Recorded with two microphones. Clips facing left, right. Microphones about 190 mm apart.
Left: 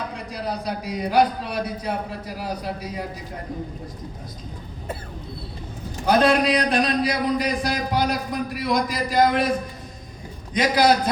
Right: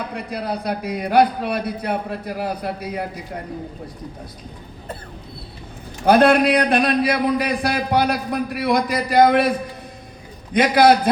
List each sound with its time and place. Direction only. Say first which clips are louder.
0.3 s a man's voice: right 4 dB; 60° right (ahead or behind)
6.1 s a man's voice: right 4 dB; 60° right (ahead or behind)
10.5 s a man's voice: right 4 dB; 60° right (ahead or behind)